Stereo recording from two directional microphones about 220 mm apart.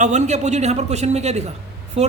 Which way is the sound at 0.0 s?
30° right (ahead or behind).